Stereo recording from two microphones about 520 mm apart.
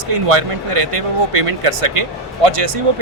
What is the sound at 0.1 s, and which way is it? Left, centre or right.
A man's voice, right.